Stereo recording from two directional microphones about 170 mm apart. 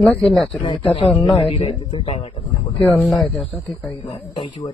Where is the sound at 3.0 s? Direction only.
Centre (ahead or behind).